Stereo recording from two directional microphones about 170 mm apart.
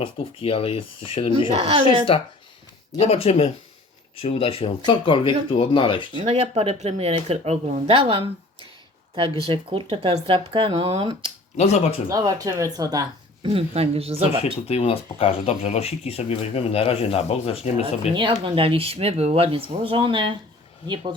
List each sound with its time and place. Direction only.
0.0 s speech: 30° left (ahead or behind)
6.1 s speech: 35° right (ahead or behind)
11.5 s speech: 40° left (ahead or behind)
12.0 s speech: 20° right (ahead or behind)
13.5 s speech: 35° right (ahead or behind)
14.4 s speech: 40° left (ahead or behind)
18.1 s speech: 30° right (ahead or behind)